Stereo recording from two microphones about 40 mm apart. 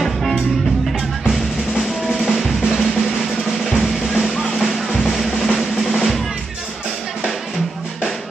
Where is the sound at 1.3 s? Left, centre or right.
Centre.